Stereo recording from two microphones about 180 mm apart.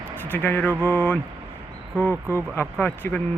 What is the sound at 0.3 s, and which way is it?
Speech, 10° left (ahead or behind).